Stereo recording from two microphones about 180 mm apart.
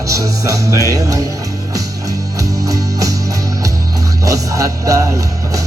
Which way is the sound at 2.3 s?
20° right (ahead or behind).